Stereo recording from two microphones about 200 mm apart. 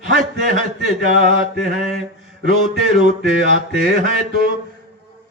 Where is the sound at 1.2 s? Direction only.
40° right (ahead or behind).